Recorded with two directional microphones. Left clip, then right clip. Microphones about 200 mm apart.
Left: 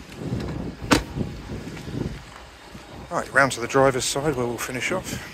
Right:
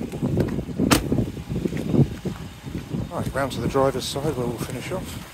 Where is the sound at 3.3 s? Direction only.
5° left (ahead or behind).